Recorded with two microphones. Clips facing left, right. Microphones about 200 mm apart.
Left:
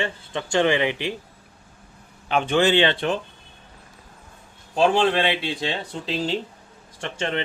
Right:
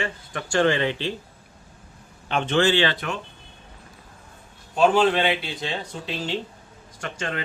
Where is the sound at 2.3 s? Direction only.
10° left (ahead or behind); by 3.1 s 25° left (ahead or behind).